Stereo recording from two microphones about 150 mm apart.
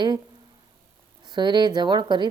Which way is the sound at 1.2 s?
30° right (ahead or behind).